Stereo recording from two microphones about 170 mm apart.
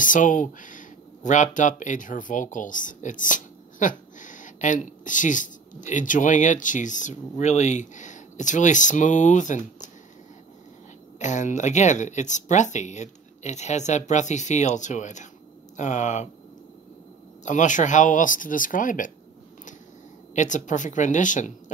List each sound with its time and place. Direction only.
0.0 s speech: 50° left (ahead or behind)
11.1 s speech: 45° left (ahead or behind)
17.5 s speech: 45° left (ahead or behind)
20.3 s speech: 45° left (ahead or behind)